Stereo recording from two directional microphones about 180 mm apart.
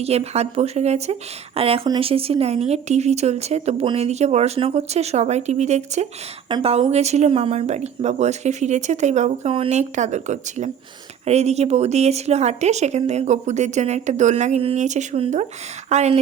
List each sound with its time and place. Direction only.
0.0 s speech: 35° right (ahead or behind)